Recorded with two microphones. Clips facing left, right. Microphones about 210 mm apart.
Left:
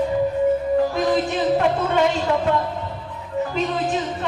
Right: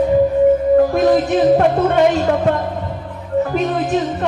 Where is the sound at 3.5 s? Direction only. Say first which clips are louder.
Right 5 dB; 55° right (ahead or behind).